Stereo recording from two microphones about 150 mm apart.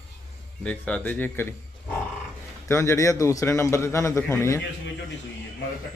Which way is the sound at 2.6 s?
20° left (ahead or behind).